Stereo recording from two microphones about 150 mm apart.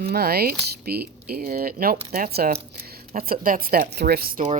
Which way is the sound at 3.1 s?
75° right (ahead or behind).